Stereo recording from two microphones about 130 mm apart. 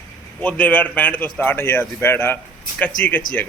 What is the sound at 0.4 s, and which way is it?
Speech, 10° left (ahead or behind).